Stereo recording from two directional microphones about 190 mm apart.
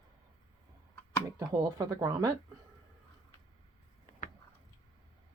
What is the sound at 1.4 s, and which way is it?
Speech, 20° right (ahead or behind).